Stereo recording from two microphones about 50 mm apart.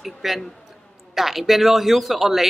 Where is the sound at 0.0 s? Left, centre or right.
Centre.